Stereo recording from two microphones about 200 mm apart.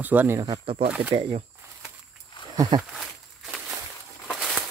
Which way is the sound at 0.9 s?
5° right (ahead or behind).